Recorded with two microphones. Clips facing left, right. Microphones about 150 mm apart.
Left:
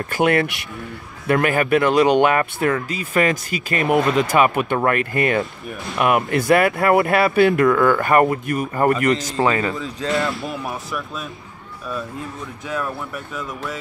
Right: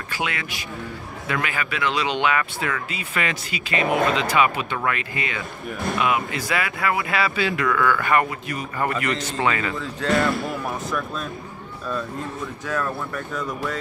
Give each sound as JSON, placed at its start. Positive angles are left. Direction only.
{"t": 0.1, "sound": "speech", "side_deg": 55}
{"t": 12.6, "sound": "speech", "side_deg": 15}